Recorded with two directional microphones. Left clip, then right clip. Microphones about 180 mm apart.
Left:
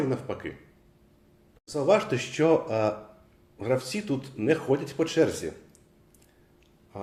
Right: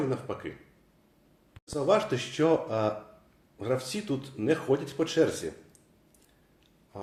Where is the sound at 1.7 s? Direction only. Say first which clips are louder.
Left 2 dB; 10° left (ahead or behind).